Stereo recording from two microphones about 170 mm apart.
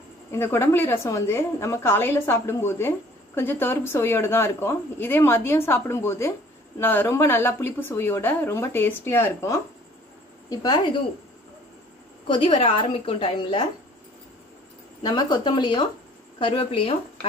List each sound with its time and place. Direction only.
0.3 s a woman's voice: 15° left (ahead or behind)
12.3 s a woman's voice: 30° left (ahead or behind)
15.0 s a woman's voice: 25° left (ahead or behind)